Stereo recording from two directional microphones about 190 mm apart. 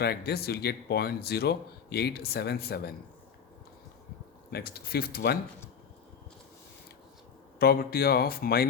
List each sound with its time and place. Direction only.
0.0 s a man's voice: 55° left (ahead or behind)
4.5 s speech: 55° left (ahead or behind)
7.6 s speech: 55° left (ahead or behind)